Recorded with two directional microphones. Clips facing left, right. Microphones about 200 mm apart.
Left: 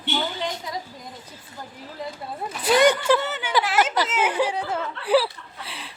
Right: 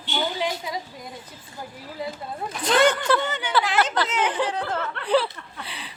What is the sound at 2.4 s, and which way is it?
Speech, 10° left (ahead or behind).